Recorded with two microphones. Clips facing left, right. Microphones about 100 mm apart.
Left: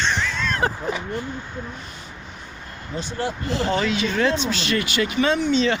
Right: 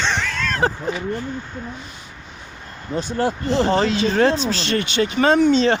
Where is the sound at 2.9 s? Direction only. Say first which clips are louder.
Right 6 dB; 45° right (ahead or behind).